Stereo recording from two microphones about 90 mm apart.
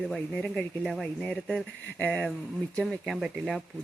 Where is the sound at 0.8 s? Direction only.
5° right (ahead or behind).